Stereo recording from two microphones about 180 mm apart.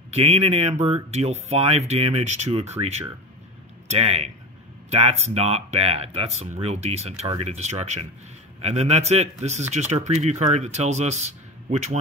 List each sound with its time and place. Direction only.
0.1 s speech: 35° right (ahead or behind)